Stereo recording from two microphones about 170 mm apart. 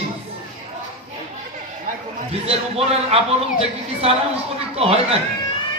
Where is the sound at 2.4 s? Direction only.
35° right (ahead or behind).